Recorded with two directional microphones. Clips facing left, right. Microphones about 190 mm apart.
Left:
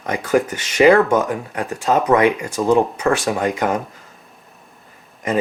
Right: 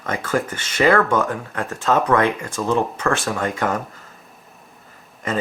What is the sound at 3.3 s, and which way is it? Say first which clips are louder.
Speech: left 3 dB; 15° left (ahead or behind).